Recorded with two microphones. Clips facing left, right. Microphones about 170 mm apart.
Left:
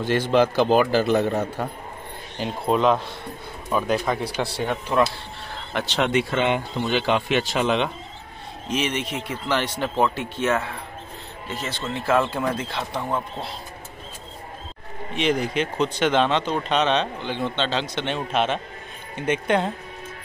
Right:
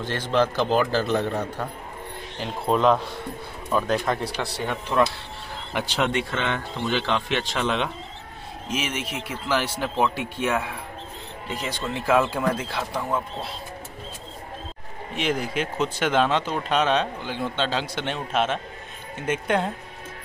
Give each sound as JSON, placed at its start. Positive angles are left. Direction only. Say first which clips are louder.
{"t": 0.0, "sound": "a man's voice", "louder": "left 4 dB", "side_deg": 10}
{"t": 1.3, "sound": "a man's voice", "louder": "left 3 dB", "side_deg": 25}
{"t": 2.6, "sound": "speech", "louder": "even", "side_deg": 5}
{"t": 4.9, "sound": "a man's voice", "louder": "left 1 dB", "side_deg": 15}
{"t": 5.7, "sound": "speech", "louder": "left 1 dB", "side_deg": -10}
{"t": 6.4, "sound": "a man's voice", "louder": "left 4 dB", "side_deg": 15}
{"t": 8.6, "sound": "speech", "louder": "left 4 dB", "side_deg": -5}
{"t": 15.1, "sound": "speech", "louder": "left 3 dB", "side_deg": -5}